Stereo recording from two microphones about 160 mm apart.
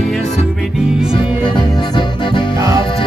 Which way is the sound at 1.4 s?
30° left (ahead or behind).